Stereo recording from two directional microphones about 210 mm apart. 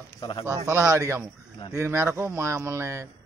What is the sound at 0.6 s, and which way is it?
A man's voice, 15° right (ahead or behind).